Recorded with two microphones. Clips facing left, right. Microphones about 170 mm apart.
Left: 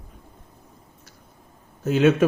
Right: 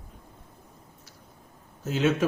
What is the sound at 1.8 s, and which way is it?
Speech, 60° left (ahead or behind).